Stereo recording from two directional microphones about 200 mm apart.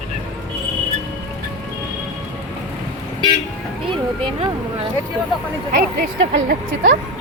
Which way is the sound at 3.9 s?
25° right (ahead or behind).